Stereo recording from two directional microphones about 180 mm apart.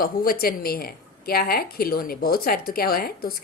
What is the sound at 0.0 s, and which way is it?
A woman's voice, 55° left (ahead or behind).